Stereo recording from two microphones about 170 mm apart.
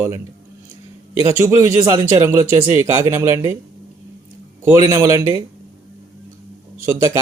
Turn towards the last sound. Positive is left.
turn(degrees=-15)  # may be behind; listen again after turning